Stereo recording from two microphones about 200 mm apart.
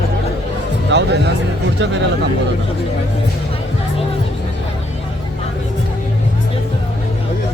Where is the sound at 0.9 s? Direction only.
60° right (ahead or behind).